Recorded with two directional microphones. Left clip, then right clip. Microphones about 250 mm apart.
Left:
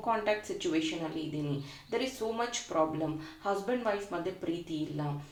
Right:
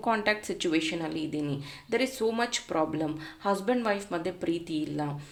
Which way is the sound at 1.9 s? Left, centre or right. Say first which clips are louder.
Right 6 dB; right.